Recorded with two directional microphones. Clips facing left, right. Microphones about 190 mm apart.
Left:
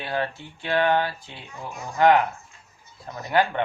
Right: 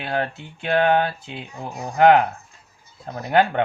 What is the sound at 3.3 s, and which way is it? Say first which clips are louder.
Speech: right 4 dB; 55° right (ahead or behind).